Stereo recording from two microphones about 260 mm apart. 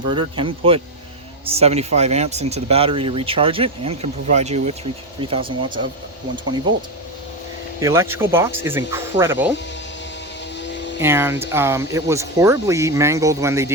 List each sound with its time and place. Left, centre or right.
0.1 s speech: centre
10.6 s a sound: left
11.0 s speech: centre